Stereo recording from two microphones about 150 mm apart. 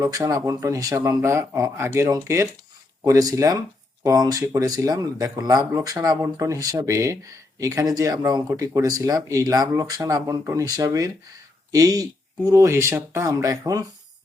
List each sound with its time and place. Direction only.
0.0 s speech: 25° right (ahead or behind)